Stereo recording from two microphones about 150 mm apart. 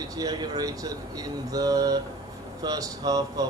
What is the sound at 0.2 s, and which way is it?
Speech, 25° right (ahead or behind).